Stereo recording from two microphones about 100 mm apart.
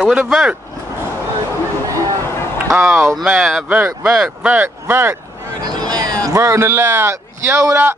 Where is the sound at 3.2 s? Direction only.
5° right (ahead or behind).